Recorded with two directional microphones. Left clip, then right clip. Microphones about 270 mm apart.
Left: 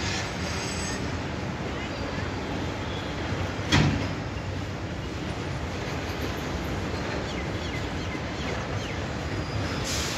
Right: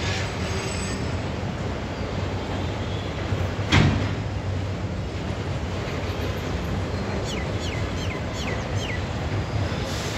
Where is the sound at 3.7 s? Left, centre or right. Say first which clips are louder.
Right 3 dB; left.